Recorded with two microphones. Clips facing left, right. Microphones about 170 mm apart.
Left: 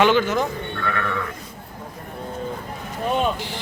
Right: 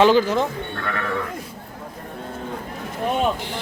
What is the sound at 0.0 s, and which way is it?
Speech, 30° right (ahead or behind).